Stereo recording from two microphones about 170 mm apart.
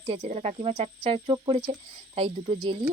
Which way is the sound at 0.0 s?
30° right (ahead or behind).